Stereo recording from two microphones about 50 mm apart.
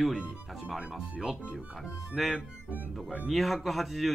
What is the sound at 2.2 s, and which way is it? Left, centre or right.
Speech, centre.